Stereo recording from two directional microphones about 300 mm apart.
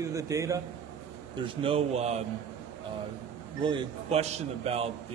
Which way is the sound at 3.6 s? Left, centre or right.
Centre.